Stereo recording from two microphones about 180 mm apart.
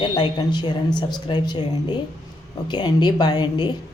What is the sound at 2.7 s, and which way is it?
A woman's voice, 25° left (ahead or behind).